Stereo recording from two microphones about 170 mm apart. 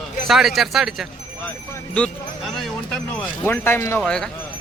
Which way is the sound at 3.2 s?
10° left (ahead or behind).